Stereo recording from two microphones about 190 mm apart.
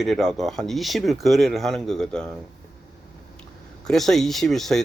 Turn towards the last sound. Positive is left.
turn(degrees=0)  # may be behind; listen again after turning